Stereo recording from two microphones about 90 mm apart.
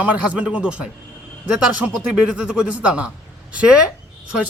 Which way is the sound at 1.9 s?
10° right (ahead or behind).